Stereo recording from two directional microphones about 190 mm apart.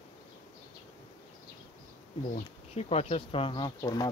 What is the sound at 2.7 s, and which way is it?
Speech, 35° left (ahead or behind).